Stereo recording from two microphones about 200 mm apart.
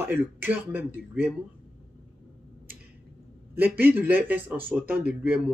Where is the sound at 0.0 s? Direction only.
10° right (ahead or behind).